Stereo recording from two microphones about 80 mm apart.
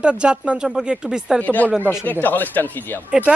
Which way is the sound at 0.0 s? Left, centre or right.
Centre.